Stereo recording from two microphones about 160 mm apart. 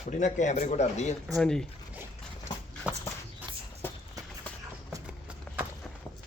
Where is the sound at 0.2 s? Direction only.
50° left (ahead or behind).